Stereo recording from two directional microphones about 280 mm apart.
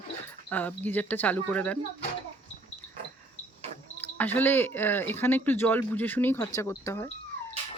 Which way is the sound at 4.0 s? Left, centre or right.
Centre.